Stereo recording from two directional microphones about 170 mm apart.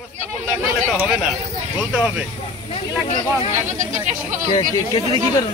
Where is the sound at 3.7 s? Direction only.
45° right (ahead or behind).